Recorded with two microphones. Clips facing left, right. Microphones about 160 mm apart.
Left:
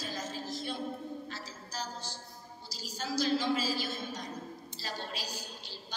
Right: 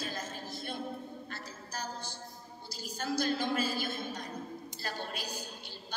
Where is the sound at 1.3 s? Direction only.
55° right (ahead or behind).